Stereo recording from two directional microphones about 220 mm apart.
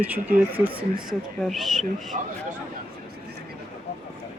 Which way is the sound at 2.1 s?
35° right (ahead or behind).